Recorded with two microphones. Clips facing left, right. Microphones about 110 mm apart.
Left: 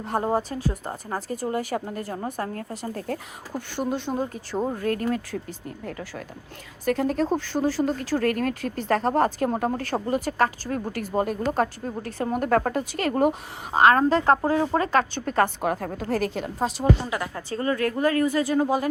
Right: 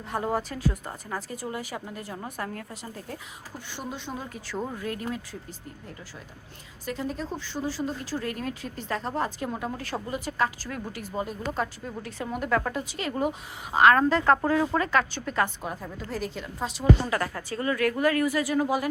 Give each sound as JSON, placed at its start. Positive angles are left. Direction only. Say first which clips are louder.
{"t": 0.0, "sound": "a woman's voice", "louder": "left 4 dB", "side_deg": 40}
{"t": 2.1, "sound": "speech", "louder": "left 3 dB", "side_deg": 35}
{"t": 6.8, "sound": "a woman's voice", "louder": "left 9 dB", "side_deg": 60}
{"t": 10.7, "sound": "speech", "louder": "left 6 dB", "side_deg": 35}
{"t": 10.9, "sound": "a woman's voice", "louder": "left 8 dB", "side_deg": 55}
{"t": 13.7, "sound": "speech", "louder": "left 2 dB", "side_deg": 30}
{"t": 15.1, "sound": "a woman's voice", "louder": "left 5 dB", "side_deg": 45}
{"t": 15.6, "sound": "speech", "louder": "left 9 dB", "side_deg": 65}
{"t": 16.6, "sound": "speech", "louder": "left 6 dB", "side_deg": 40}
{"t": 17.1, "sound": "speech", "louder": "right 1 dB", "side_deg": 15}
{"t": 17.5, "sound": "speech", "louder": "left 2 dB", "side_deg": 35}